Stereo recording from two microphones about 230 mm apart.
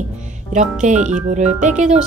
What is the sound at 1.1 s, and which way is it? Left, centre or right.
Speech, right.